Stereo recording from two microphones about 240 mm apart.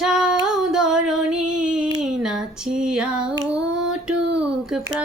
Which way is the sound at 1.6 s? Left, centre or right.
Centre.